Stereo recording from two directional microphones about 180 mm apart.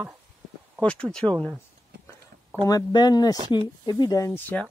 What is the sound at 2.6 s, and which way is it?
Speech, 20° left (ahead or behind).